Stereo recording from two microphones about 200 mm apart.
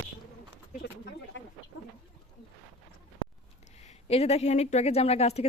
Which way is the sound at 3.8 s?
30° left (ahead or behind).